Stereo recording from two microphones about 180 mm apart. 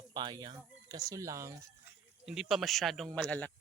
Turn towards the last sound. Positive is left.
turn(degrees=5)  # may be behind; listen again after turning